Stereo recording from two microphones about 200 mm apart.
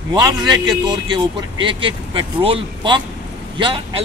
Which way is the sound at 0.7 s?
20° right (ahead or behind).